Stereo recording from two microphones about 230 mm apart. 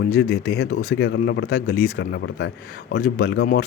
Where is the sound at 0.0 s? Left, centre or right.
Left.